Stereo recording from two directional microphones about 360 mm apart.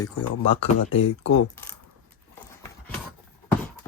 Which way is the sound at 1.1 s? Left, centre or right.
Left.